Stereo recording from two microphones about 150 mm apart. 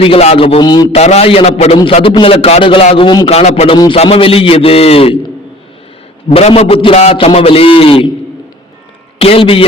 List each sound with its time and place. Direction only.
0.0 s a man's voice: 40° left (ahead or behind)
0.6 s a man's voice: 25° left (ahead or behind)
0.9 s a man's voice: 45° left (ahead or behind)
6.3 s a man's voice: 40° left (ahead or behind)
9.2 s a man's voice: 40° left (ahead or behind)